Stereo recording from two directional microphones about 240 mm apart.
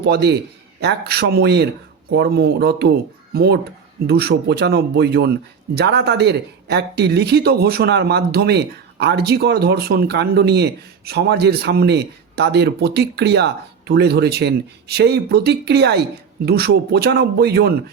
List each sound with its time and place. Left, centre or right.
0.0 s speech: right